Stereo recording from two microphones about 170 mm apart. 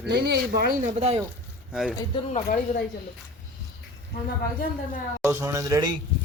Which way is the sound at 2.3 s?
50° left (ahead or behind).